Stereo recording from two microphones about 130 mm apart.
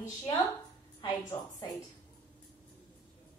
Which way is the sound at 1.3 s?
45° left (ahead or behind).